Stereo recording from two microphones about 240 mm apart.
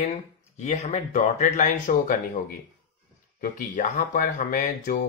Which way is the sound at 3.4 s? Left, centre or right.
Left.